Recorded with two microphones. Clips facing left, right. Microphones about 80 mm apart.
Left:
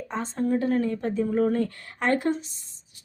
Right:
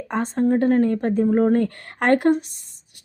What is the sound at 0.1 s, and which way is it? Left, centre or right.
Speech, right.